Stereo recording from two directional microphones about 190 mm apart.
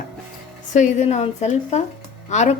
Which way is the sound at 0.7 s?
35° left (ahead or behind).